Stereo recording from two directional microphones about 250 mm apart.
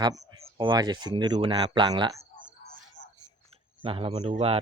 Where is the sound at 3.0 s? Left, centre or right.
Left.